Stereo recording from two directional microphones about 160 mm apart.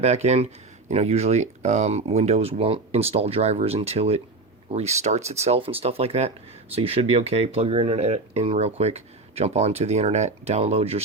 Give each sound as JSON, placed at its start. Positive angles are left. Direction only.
{"t": 0.0, "sound": "speech", "side_deg": -45}